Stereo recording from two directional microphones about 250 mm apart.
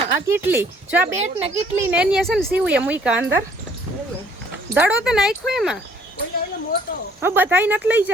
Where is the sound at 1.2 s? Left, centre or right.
Right.